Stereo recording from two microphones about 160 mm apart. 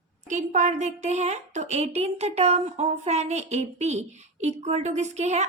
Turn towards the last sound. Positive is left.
turn(degrees=-45)  # may be behind; listen again after turning